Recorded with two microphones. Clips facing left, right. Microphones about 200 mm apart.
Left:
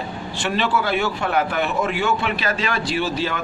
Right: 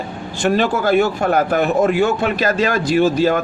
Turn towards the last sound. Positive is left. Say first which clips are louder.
# right 9 dB
turn(degrees=-45)  # may be behind; listen again after turning